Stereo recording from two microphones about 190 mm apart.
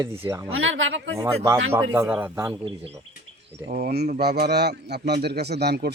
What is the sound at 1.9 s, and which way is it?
Speech, 10° right (ahead or behind).